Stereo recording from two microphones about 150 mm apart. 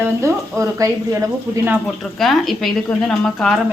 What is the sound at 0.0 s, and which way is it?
Speech, 20° right (ahead or behind).